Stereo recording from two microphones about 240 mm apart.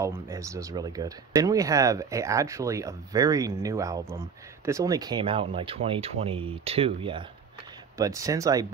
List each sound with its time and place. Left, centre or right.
0.0 s speech: centre